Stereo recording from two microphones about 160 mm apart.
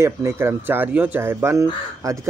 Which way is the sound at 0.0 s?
15° right (ahead or behind).